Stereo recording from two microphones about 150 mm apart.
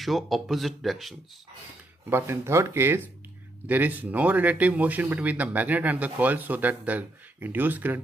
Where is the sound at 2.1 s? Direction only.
15° right (ahead or behind).